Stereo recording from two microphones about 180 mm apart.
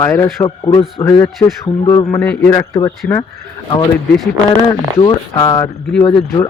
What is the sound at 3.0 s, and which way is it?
Speech, 5° left (ahead or behind).